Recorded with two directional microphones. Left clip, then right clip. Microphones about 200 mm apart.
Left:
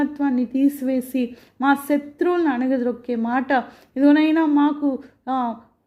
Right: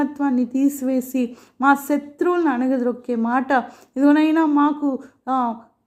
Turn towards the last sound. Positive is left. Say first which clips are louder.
# right 2 dB
turn(degrees=0)  # may be behind; listen again after turning